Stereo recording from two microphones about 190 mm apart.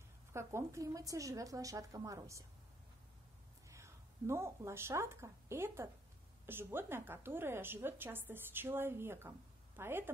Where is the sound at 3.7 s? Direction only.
15° right (ahead or behind).